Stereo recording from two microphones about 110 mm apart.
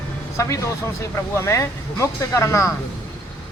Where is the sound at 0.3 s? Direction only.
25° left (ahead or behind).